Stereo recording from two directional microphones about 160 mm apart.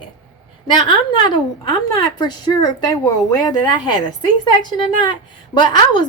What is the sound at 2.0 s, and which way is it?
A woman's voice, 25° left (ahead or behind).